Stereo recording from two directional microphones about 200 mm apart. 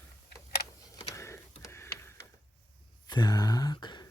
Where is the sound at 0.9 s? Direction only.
15° left (ahead or behind).